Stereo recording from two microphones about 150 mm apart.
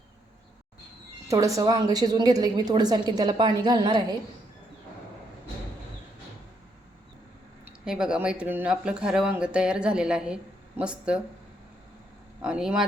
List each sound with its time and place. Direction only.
1.3 s a woman's voice: 20° right (ahead or behind)
7.9 s speech: 5° right (ahead or behind)
12.4 s speech: 5° right (ahead or behind)